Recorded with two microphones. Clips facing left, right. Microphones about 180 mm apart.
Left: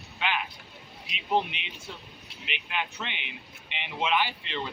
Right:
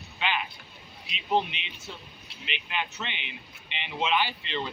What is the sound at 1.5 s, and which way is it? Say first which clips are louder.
Speech: left 1 dB; 55° left (ahead or behind).